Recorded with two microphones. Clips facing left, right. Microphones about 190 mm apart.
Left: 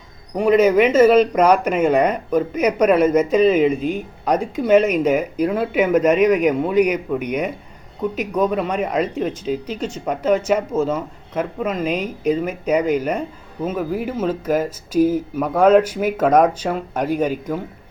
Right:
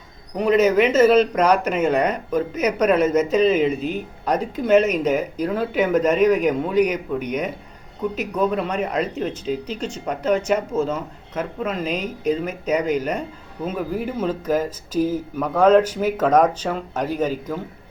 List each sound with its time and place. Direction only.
0.3 s speech: 10° left (ahead or behind)